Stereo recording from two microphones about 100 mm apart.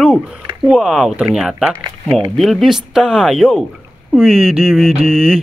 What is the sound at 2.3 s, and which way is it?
Speech, centre (ahead or behind).